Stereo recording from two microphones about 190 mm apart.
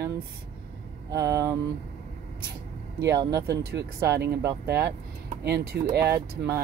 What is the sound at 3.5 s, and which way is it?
Speech, 55° right (ahead or behind).